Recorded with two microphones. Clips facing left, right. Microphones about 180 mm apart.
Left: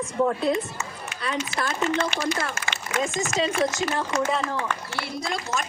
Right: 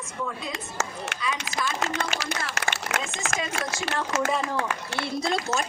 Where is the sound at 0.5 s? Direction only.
85° right.